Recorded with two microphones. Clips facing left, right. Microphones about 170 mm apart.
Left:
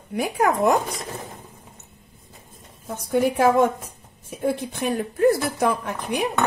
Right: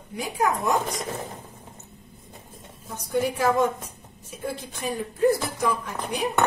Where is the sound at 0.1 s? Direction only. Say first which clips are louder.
Left 4 dB; 60° left (ahead or behind).